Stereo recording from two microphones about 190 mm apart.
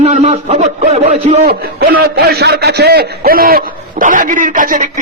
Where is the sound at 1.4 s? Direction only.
50° right (ahead or behind).